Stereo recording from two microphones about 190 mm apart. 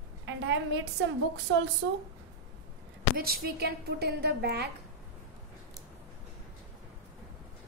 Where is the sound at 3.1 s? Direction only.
55° right (ahead or behind).